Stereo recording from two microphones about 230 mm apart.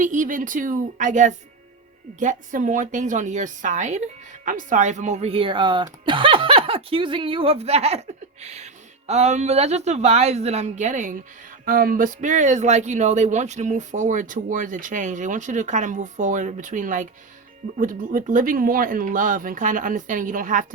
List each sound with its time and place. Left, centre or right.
0.0 s a woman's voice: right